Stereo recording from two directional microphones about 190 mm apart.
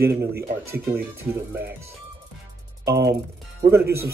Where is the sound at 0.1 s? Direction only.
10° right (ahead or behind).